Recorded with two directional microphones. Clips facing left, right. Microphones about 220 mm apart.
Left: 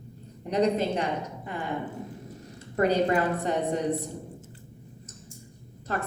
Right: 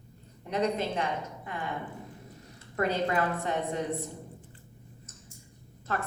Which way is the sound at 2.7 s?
35° left (ahead or behind).